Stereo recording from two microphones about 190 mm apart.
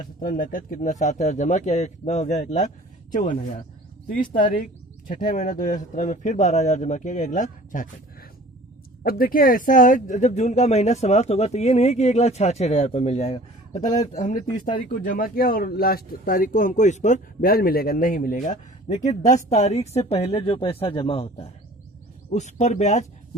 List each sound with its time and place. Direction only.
0.0 s speech: 45° left (ahead or behind)